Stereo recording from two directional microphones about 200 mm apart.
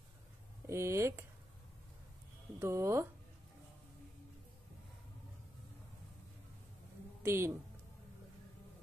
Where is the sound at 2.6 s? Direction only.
15° right (ahead or behind).